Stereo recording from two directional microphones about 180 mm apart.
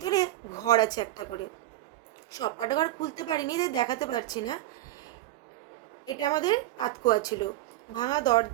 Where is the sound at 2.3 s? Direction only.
20° left (ahead or behind).